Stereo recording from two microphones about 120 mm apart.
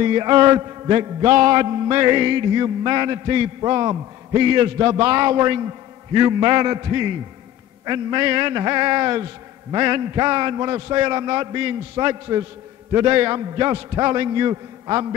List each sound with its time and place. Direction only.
0.0 s mantra: 35° right (ahead or behind)